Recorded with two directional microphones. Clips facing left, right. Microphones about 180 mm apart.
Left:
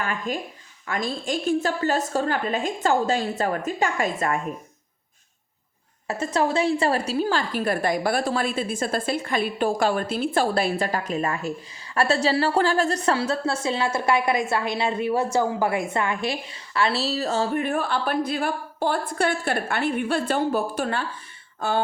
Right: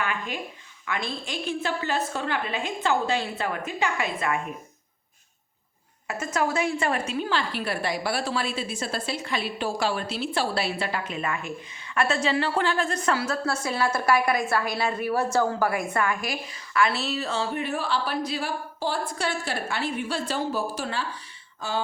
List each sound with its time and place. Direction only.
0.0 s a woman's voice: 40° left (ahead or behind)
6.1 s a woman's voice: 35° left (ahead or behind); by 21.0 s 55° left (ahead or behind)
21.6 s a sound: 55° left (ahead or behind)